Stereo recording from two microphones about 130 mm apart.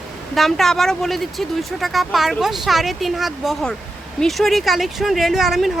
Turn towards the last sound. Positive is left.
turn(degrees=0)  # may be behind; listen again after turning